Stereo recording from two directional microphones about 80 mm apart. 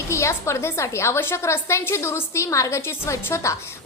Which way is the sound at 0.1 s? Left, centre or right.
Left.